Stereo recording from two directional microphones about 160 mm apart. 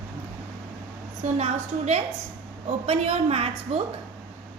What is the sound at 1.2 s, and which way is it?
A woman's voice, 45° right (ahead or behind).